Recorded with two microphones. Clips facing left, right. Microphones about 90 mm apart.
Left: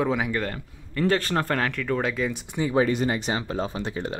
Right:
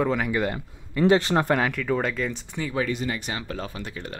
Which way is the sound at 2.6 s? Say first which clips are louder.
Left 5 dB; 25° left (ahead or behind).